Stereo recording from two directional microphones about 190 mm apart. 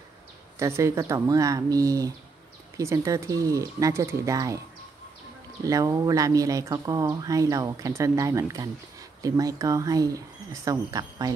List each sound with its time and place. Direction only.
0.6 s speech: 15° right (ahead or behind)
5.6 s speech: 15° right (ahead or behind)